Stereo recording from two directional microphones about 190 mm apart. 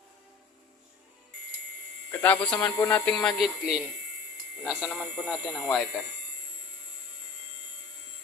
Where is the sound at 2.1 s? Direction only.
5° left (ahead or behind).